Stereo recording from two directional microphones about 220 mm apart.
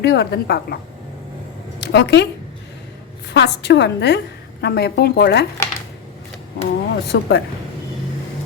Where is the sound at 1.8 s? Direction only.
50° left (ahead or behind).